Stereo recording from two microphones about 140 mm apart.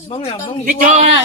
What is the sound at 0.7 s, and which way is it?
Speech, 65° right (ahead or behind).